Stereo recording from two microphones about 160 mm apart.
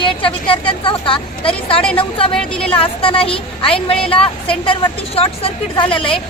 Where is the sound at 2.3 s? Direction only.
5° left (ahead or behind).